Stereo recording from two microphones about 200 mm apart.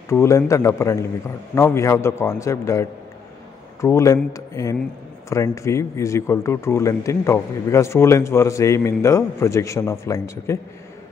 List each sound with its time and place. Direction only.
0.1 s speech: 15° left (ahead or behind)